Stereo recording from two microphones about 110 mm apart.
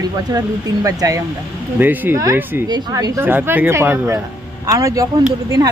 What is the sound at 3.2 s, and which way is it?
Speech, 20° right (ahead or behind).